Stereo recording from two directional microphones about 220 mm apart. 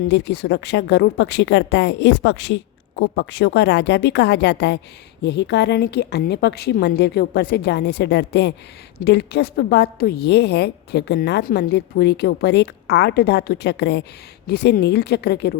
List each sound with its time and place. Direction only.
0.1 s a woman's voice: 50° left (ahead or behind)